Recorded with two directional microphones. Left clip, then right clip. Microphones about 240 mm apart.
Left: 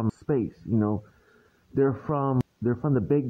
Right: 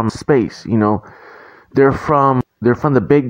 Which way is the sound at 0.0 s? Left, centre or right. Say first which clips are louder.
Right 13 dB; right.